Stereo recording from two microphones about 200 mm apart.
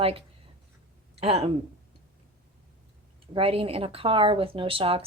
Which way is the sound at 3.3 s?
30° right (ahead or behind).